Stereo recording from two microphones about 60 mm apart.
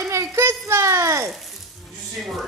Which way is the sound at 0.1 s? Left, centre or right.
Right.